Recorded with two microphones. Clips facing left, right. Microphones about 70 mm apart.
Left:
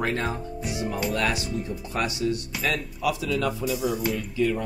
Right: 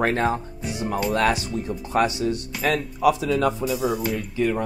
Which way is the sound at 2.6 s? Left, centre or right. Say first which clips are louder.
Right 9 dB; right.